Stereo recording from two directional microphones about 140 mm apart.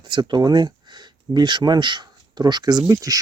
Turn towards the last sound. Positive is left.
turn(degrees=-25)  # may be behind; listen again after turning